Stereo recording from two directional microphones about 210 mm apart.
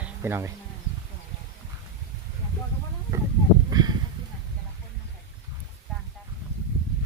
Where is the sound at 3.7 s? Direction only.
20° right (ahead or behind).